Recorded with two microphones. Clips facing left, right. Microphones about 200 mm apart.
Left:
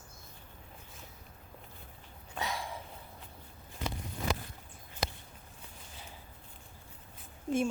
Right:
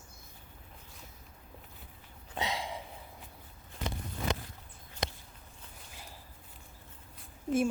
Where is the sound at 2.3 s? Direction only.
20° right (ahead or behind).